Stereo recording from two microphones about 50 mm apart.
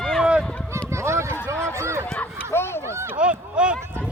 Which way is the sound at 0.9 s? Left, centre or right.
Right.